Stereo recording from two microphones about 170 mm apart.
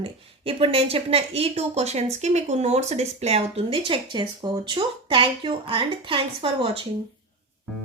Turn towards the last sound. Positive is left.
turn(degrees=-35)  # may be behind; listen again after turning